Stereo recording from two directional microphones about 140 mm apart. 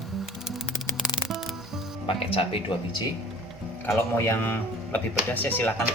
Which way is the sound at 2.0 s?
40° left (ahead or behind).